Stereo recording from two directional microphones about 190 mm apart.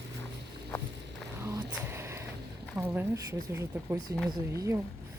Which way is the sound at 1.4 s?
15° right (ahead or behind).